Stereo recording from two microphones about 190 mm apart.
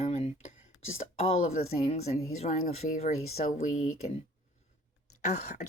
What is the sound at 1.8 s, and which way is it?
Speech, 35° left (ahead or behind).